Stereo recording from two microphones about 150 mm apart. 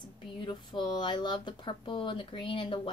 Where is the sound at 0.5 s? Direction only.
30° left (ahead or behind).